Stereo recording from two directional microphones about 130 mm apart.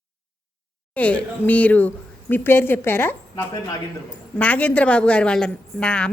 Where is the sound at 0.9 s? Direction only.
10° left (ahead or behind).